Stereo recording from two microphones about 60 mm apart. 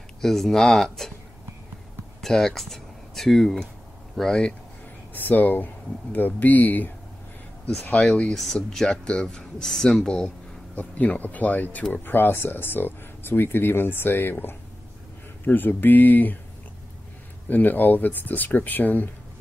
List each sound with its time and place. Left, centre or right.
0.2 s speech: centre
2.2 s speech: centre
5.1 s speech: left
7.6 s speech: centre
10.7 s speech: left
17.5 s speech: left